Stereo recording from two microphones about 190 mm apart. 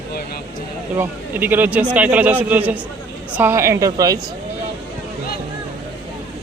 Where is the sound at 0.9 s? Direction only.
10° right (ahead or behind).